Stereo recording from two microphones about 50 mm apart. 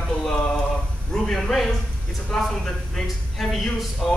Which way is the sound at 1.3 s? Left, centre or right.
Centre.